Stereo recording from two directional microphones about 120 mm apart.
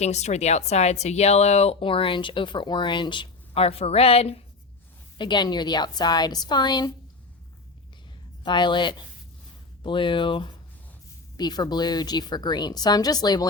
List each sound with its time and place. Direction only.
0.0 s speech: 70° left (ahead or behind)
5.1 s a woman's voice: 40° left (ahead or behind)
8.4 s a woman's voice: 40° left (ahead or behind)